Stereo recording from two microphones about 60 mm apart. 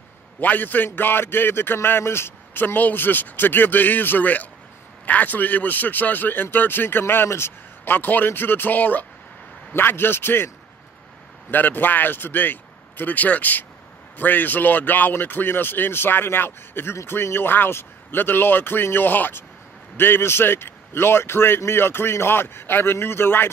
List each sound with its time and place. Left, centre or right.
0.4 s a man's voice: left
11.5 s a man's voice: left